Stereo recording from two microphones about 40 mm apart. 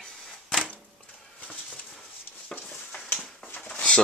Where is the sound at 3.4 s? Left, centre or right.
Left.